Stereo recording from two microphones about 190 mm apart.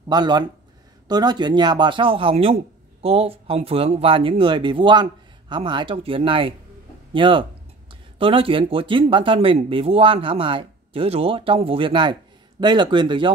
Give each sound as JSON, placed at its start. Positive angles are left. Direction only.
{"t": 0.1, "sound": "speech", "side_deg": -20}